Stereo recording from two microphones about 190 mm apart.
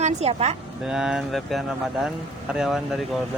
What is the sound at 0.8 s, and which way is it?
Speech, 5° right (ahead or behind).